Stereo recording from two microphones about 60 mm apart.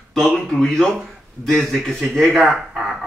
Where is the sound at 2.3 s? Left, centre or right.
Centre.